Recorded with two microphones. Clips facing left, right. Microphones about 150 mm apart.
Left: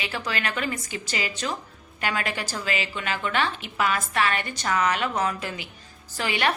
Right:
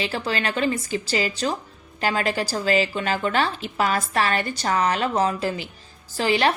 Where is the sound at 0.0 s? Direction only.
30° right (ahead or behind).